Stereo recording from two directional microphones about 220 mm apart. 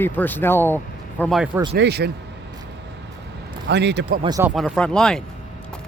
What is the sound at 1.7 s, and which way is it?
Speech, 50° right (ahead or behind).